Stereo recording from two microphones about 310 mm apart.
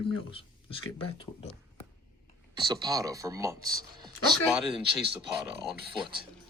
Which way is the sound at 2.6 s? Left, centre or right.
Centre.